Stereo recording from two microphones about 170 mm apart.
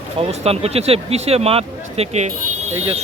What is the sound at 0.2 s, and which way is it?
Speech, 35° right (ahead or behind).